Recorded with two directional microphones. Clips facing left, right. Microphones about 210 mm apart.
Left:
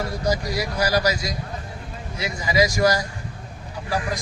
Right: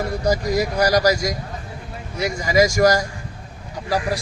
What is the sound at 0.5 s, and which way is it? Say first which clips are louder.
Speech: right 5 dB; 40° right (ahead or behind).